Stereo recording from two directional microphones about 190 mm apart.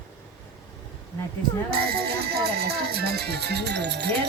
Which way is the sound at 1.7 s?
55° right (ahead or behind).